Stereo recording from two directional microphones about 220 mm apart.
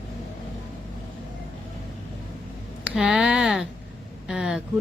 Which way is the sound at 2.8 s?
5° right (ahead or behind).